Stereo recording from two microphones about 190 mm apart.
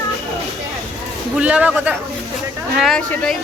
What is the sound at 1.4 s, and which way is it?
Speech, 5° right (ahead or behind).